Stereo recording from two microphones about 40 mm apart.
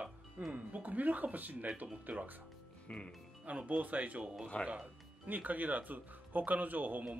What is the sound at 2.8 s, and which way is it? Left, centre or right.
Music, left.